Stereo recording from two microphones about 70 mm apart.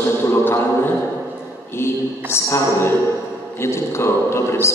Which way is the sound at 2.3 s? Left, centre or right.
Left.